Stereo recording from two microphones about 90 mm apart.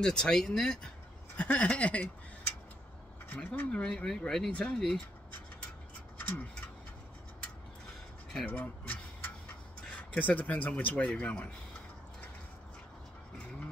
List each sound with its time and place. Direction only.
0.0 s speech: 10° left (ahead or behind)
3.3 s speech: 20° left (ahead or behind)
8.5 s a sound: 20° left (ahead or behind)
9.8 s speech: 15° left (ahead or behind)